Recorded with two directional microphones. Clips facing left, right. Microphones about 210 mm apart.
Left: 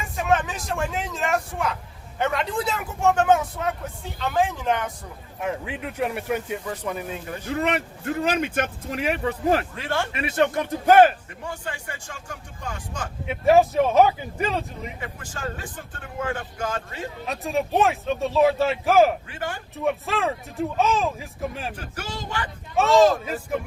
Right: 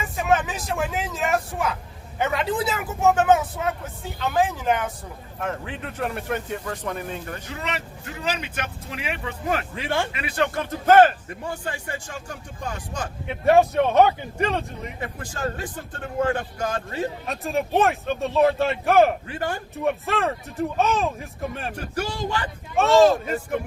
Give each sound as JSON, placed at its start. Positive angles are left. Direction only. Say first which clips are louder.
{"t": 0.0, "sound": "speech", "louder": "right 1 dB", "side_deg": -5}
{"t": 5.4, "sound": "speech", "louder": "left 1 dB", "side_deg": 10}
{"t": 7.4, "sound": "speech", "louder": "left 7 dB", "side_deg": 50}
{"t": 9.7, "sound": "speech", "louder": "right 1 dB", "side_deg": -15}
{"t": 10.2, "sound": "speech", "louder": "left 3 dB", "side_deg": 25}
{"t": 11.4, "sound": "speech", "louder": "right 2 dB", "side_deg": -35}
{"t": 13.2, "sound": "speech", "louder": "even", "side_deg": 0}
{"t": 15.3, "sound": "speech", "louder": "right 4 dB", "side_deg": -40}
{"t": 17.2, "sound": "speech", "louder": "even", "side_deg": 0}
{"t": 19.3, "sound": "speech", "louder": "right 3 dB", "side_deg": -40}
{"t": 19.7, "sound": "speech", "louder": "left 1 dB", "side_deg": 0}
{"t": 22.7, "sound": "speech", "louder": "right 1 dB", "side_deg": 0}